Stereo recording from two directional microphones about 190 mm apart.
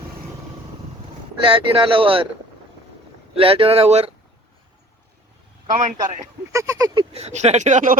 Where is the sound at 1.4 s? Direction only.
25° right (ahead or behind).